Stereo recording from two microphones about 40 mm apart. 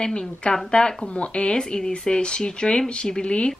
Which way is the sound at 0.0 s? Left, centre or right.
Left.